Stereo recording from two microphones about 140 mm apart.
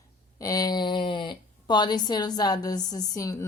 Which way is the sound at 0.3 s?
25° left (ahead or behind).